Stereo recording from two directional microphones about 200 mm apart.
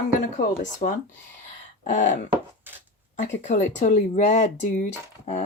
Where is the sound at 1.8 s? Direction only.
35° left (ahead or behind).